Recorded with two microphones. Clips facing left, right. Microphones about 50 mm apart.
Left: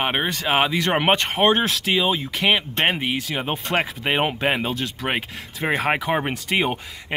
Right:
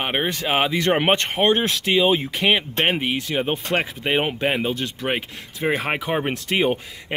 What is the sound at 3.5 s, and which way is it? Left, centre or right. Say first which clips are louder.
Speech: even; centre.